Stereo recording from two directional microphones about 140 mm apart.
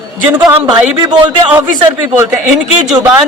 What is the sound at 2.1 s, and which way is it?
Speech, 15° right (ahead or behind).